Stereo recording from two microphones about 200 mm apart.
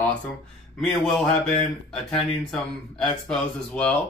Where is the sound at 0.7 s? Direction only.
Centre (ahead or behind).